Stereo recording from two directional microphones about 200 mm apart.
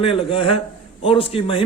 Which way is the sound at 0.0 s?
25° left (ahead or behind).